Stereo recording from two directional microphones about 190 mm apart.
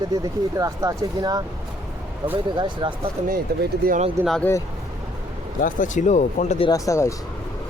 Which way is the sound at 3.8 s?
55° right (ahead or behind).